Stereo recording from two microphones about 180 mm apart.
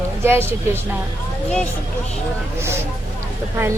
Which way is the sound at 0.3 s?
10° right (ahead or behind).